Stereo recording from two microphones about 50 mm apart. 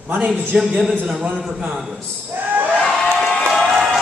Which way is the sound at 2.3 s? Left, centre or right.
Right.